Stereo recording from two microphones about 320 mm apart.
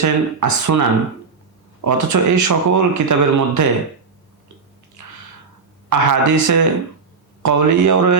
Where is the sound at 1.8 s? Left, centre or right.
Right.